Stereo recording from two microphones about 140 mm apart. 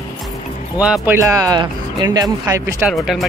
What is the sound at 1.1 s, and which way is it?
Speech, 25° right (ahead or behind).